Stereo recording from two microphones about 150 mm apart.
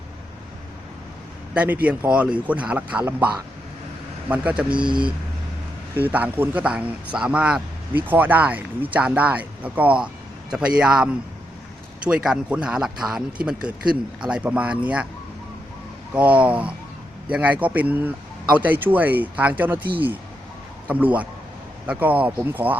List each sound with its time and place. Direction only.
1.5 s speech: 10° right (ahead or behind)
4.3 s speech: 10° right (ahead or behind)
4.8 s speech: 30° right (ahead or behind)
6.0 s speech: 10° right (ahead or behind)
16.1 s speech: 10° right (ahead or behind)